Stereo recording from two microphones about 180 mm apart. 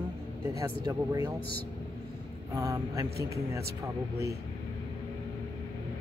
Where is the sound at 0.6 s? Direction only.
20° right (ahead or behind).